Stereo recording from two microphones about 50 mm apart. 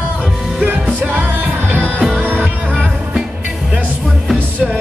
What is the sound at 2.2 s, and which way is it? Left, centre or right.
Music, right.